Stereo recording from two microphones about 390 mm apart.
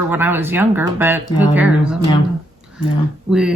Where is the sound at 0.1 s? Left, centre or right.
Centre.